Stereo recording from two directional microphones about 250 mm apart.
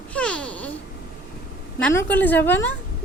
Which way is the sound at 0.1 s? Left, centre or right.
Centre.